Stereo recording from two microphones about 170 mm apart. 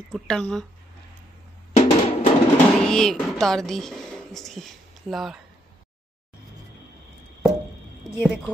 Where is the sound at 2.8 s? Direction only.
Centre (ahead or behind).